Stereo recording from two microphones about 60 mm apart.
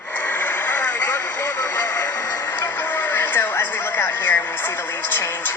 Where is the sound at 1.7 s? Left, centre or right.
Left.